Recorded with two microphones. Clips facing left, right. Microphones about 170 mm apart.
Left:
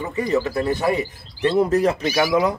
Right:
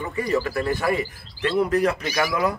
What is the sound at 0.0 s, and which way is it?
Speech, 20° left (ahead or behind).